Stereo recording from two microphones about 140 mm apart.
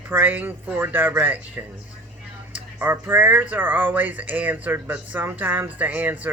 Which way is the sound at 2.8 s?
15° right (ahead or behind).